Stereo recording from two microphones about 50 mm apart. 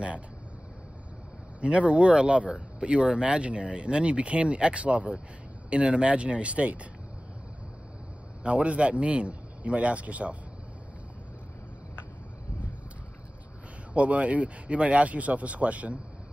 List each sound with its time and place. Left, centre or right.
1.6 s speech: right
8.5 s speech: right
13.9 s speech: right